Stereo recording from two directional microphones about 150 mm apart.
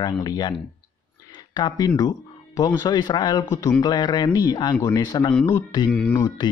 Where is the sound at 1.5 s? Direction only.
30° left (ahead or behind).